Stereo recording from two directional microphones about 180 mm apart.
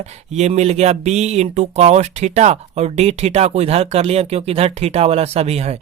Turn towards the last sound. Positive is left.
turn(degrees=-35)  # may be behind; listen again after turning